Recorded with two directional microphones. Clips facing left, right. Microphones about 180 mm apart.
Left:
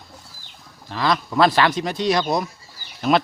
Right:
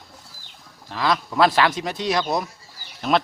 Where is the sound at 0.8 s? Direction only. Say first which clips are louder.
Left 1 dB; 5° right (ahead or behind).